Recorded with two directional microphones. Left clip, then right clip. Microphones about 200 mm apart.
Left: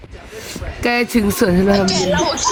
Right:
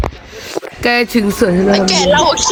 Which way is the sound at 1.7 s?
45° right (ahead or behind).